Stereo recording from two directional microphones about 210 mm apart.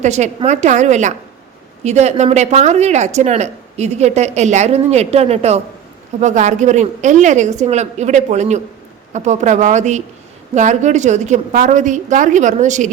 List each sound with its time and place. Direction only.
0.0 s speech: 35° right (ahead or behind)